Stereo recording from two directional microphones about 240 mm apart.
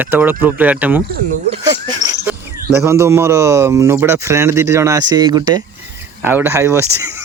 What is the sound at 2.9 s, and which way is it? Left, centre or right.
Speech, centre.